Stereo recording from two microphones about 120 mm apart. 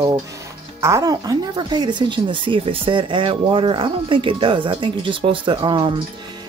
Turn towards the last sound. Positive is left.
turn(degrees=-45)  # may be behind; listen again after turning